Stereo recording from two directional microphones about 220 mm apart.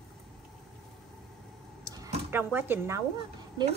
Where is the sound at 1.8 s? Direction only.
15° right (ahead or behind).